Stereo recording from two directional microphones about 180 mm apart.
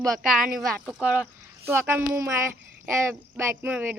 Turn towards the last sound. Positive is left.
turn(degrees=-10)  # may be behind; listen again after turning